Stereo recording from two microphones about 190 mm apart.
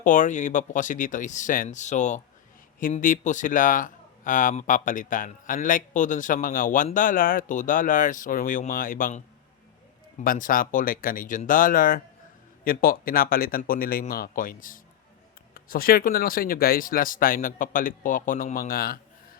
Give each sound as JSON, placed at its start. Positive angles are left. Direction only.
{"t": 0.0, "sound": "speech", "side_deg": 40}